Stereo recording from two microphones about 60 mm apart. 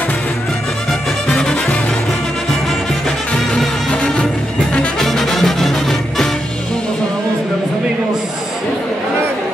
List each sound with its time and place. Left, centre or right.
1.3 s music: centre
3.9 s music: centre